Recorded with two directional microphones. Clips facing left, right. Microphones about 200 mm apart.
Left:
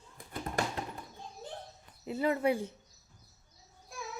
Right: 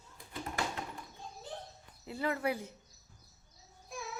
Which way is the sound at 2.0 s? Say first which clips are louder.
Left 5 dB; 20° left (ahead or behind).